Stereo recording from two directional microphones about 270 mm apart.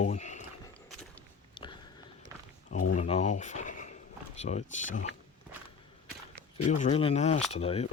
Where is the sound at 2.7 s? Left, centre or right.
Left.